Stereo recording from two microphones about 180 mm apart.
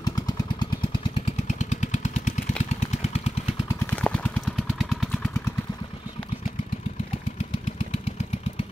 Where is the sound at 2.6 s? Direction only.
40° left (ahead or behind).